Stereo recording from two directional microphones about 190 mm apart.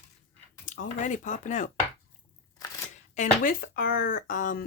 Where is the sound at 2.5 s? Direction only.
20° left (ahead or behind).